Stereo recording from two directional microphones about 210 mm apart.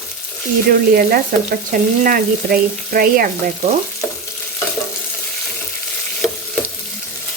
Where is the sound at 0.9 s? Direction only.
45° right (ahead or behind).